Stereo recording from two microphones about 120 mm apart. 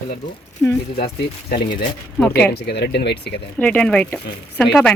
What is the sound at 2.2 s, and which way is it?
Speech, 15° left (ahead or behind).